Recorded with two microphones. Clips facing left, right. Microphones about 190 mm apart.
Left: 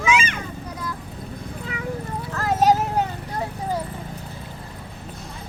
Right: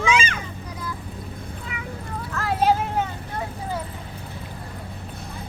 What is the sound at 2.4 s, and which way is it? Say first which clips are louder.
Vehicle: left 2 dB; 40° left (ahead or behind).